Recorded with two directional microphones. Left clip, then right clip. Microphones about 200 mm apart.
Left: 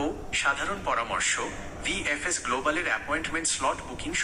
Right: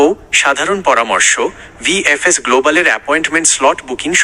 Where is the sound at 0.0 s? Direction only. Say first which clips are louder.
Right 17 dB; 55° right (ahead or behind).